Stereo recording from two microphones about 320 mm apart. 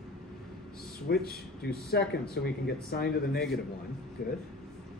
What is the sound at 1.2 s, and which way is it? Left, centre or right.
Speech, left.